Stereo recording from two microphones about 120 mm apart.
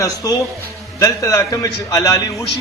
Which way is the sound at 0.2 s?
30° left (ahead or behind).